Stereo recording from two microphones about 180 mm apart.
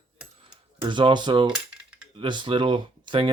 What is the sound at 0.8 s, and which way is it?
Speech, 25° right (ahead or behind).